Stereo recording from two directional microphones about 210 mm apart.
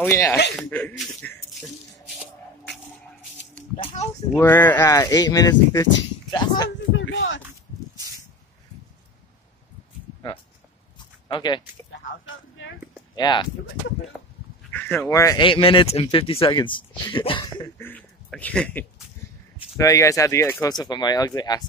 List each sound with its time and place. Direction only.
0.0 s speech: 10° left (ahead or behind)
3.7 s speech: 25° left (ahead or behind)
4.4 s speech: 10° left (ahead or behind)
6.9 s a sound: 65° left (ahead or behind)
11.0 s a sound: 20° left (ahead or behind)
13.1 s speech: 20° left (ahead or behind)
14.7 s speech: 10° left (ahead or behind)